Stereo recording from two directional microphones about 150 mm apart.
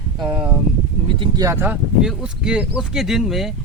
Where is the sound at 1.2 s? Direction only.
25° right (ahead or behind).